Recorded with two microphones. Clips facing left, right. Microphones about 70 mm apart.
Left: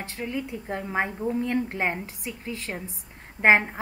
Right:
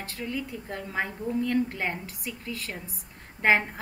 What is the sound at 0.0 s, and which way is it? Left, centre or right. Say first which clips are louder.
A woman's voice: left 2 dB; left.